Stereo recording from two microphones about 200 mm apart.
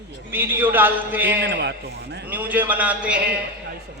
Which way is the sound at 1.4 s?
60° right (ahead or behind).